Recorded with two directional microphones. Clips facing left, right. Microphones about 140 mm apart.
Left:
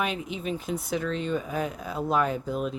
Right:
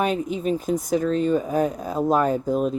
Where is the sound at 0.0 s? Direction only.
40° right (ahead or behind).